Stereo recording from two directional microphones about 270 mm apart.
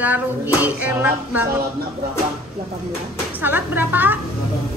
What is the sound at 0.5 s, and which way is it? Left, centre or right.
Music, centre.